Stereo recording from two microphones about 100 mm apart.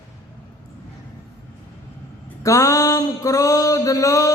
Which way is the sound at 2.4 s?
35° left (ahead or behind).